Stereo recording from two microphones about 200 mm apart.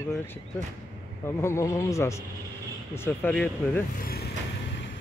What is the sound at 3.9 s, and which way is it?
Vehicle, 50° left (ahead or behind).